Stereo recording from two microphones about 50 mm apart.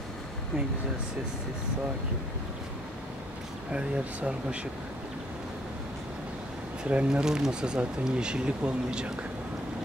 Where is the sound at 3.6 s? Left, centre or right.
Right.